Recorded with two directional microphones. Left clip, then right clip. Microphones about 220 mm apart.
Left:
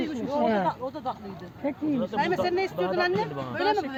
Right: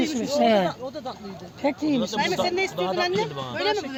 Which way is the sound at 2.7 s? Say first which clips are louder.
Right 1 dB; 40° right (ahead or behind).